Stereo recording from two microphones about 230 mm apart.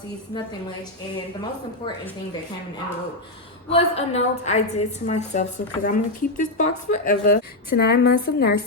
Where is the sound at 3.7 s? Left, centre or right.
Left.